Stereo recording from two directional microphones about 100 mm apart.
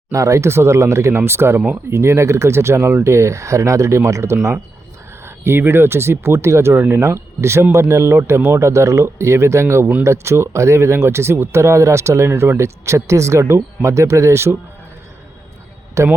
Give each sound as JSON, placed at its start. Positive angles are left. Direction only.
{"t": 0.1, "sound": "speech", "side_deg": -30}
{"t": 16.0, "sound": "speech", "side_deg": -30}